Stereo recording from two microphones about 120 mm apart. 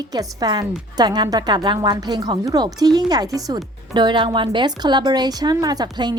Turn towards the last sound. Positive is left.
turn(degrees=-35)  # may be behind; listen again after turning